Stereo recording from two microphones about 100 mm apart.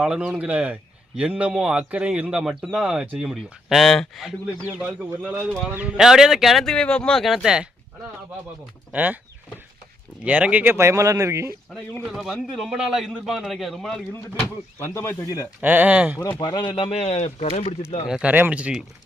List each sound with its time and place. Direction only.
0.0 s a man's voice: 5° right (ahead or behind)
4.6 s a man's voice: 15° right (ahead or behind)
8.9 s speech: 15° right (ahead or behind)
10.2 s speech: 15° right (ahead or behind)
12.1 s a man's voice: centre (ahead or behind)
14.8 s speech: 25° left (ahead or behind)
15.6 s a man's voice: 15° right (ahead or behind)
16.4 s speech: 45° left (ahead or behind); by 17.7 s 90° left
18.1 s a man's voice: 15° right (ahead or behind)